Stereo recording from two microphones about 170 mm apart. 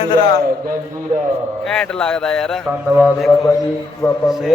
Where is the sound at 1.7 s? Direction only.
5° left (ahead or behind).